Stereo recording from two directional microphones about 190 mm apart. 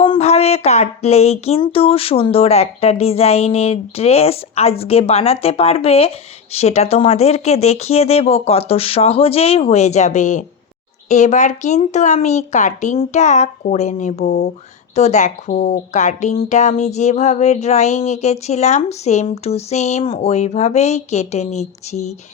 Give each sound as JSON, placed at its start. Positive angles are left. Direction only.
{"t": 0.0, "sound": "a woman's voice", "side_deg": 30}